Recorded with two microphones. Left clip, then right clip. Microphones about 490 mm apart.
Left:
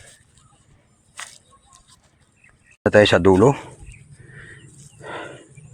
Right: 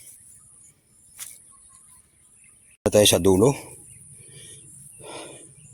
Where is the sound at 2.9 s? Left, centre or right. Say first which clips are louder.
Left 4 dB; right.